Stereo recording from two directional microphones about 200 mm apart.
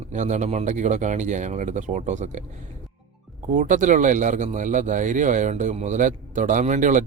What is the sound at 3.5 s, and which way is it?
A man's voice, 40° right (ahead or behind).